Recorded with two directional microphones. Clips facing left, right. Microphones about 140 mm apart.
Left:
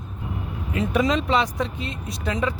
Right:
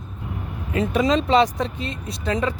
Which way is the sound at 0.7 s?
30° right (ahead or behind).